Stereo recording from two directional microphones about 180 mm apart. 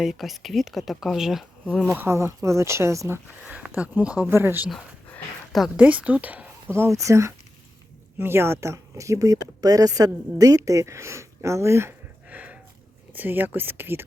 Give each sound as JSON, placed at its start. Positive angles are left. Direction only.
{"t": 0.0, "sound": "speech", "side_deg": 0}
{"t": 1.9, "sound": "speech", "side_deg": -15}
{"t": 4.7, "sound": "speech", "side_deg": 0}